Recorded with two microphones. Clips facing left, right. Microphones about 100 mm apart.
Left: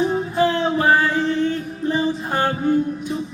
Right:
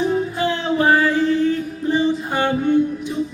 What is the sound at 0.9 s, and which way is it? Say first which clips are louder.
Music: right 3 dB; 30° left (ahead or behind).